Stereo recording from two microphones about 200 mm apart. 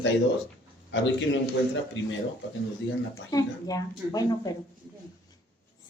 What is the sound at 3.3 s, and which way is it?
Speech, 15° left (ahead or behind).